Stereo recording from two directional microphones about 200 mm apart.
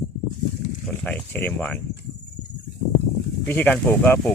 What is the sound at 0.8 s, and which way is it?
Speech, 5° left (ahead or behind).